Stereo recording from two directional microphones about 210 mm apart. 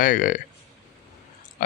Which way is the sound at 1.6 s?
40° left (ahead or behind).